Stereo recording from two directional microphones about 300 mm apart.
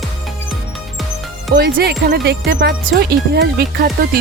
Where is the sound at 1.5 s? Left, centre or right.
Right.